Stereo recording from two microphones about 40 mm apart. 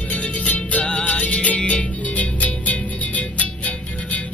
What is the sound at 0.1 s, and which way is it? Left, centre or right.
Music, left.